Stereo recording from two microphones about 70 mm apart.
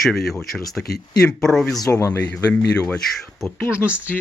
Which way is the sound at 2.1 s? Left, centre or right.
Centre.